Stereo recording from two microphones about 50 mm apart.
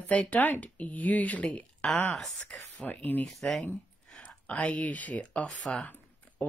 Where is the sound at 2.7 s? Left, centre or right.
Left.